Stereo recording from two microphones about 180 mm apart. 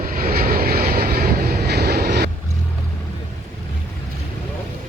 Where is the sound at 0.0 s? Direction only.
50° right (ahead or behind).